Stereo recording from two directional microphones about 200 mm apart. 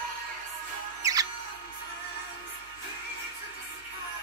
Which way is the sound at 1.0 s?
20° right (ahead or behind).